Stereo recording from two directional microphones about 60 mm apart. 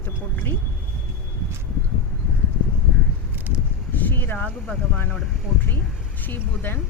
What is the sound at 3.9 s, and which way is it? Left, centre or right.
Speech, left.